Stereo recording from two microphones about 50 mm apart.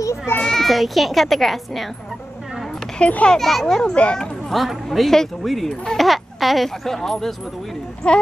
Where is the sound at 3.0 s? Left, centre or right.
Left.